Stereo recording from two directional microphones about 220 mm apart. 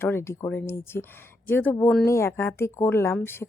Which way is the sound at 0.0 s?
10° left (ahead or behind).